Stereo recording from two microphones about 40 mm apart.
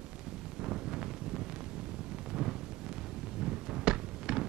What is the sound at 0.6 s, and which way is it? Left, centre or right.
Wind, centre.